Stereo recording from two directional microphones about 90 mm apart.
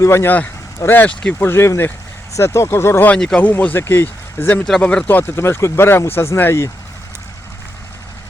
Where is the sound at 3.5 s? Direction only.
25° left (ahead or behind).